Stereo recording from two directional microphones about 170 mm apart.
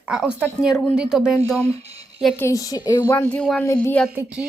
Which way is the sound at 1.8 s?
35° right (ahead or behind).